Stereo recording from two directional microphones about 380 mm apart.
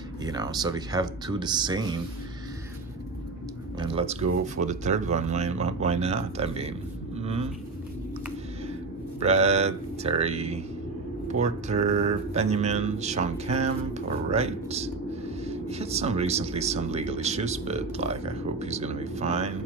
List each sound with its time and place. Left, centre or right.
0.2 s speech: centre
3.8 s speech: centre
7.2 s a sound: centre
9.2 s speech: centre